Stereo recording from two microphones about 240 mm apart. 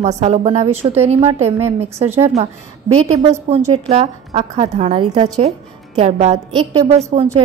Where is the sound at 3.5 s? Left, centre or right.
Right.